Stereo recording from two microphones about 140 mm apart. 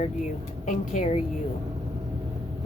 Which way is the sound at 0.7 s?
70° left (ahead or behind).